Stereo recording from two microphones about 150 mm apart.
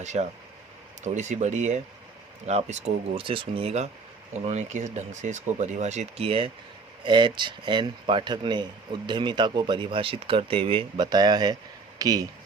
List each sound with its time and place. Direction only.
0.0 s speech: 50° right (ahead or behind); by 12.2 s 25° right (ahead or behind)